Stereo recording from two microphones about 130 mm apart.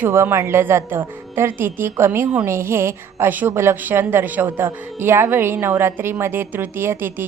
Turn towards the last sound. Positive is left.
turn(degrees=-15)  # may be behind; listen again after turning